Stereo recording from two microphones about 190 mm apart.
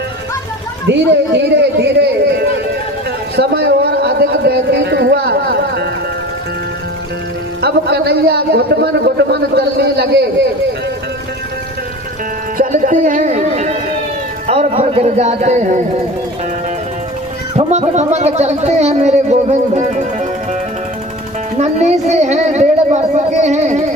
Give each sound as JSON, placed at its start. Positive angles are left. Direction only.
{"t": 1.5, "sound": "a sound", "side_deg": -60}
{"t": 7.6, "sound": "a man's voice", "side_deg": -60}
{"t": 12.5, "sound": "music", "side_deg": -45}
{"t": 14.4, "sound": "a man's voice", "side_deg": -35}
{"t": 17.6, "sound": "speech", "side_deg": -35}
{"t": 21.6, "sound": "speech", "side_deg": -35}